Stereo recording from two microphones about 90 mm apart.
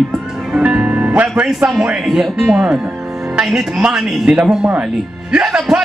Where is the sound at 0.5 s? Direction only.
15° right (ahead or behind).